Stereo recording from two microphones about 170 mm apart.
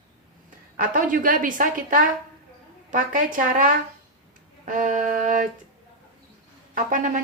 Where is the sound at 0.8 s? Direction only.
50° right (ahead or behind).